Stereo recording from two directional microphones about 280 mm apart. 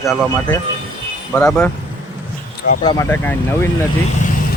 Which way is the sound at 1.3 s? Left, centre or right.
Centre.